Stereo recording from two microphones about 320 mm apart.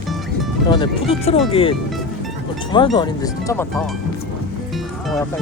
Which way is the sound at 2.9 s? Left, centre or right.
Centre.